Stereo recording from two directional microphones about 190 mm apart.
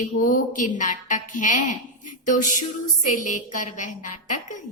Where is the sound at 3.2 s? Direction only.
40° left (ahead or behind).